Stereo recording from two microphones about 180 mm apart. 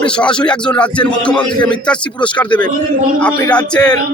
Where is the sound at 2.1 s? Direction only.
25° left (ahead or behind).